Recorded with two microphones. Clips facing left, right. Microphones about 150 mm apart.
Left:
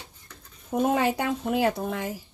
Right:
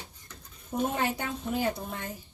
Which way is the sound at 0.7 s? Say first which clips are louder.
Left 6 dB; 90° left.